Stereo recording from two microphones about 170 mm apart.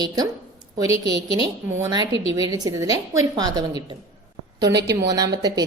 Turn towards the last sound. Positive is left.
turn(degrees=-25)  # may be behind; listen again after turning